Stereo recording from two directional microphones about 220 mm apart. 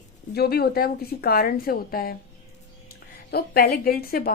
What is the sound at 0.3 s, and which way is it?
A woman's voice, 45° left (ahead or behind).